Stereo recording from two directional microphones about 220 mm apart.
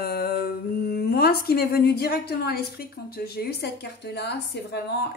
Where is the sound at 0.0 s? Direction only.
45° left (ahead or behind).